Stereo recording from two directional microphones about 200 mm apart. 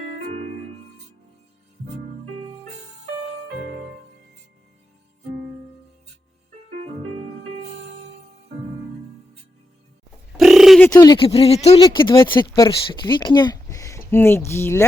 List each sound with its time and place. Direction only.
10.3 s a sound: centre (ahead or behind)
10.8 s speech: 20° left (ahead or behind)
11.8 s speech: 20° left (ahead or behind)